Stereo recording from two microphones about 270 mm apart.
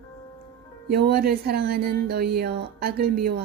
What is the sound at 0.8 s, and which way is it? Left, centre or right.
Speech, right.